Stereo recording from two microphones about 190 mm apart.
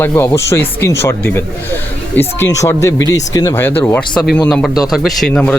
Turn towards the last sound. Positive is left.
turn(degrees=5)  # may be behind; listen again after turning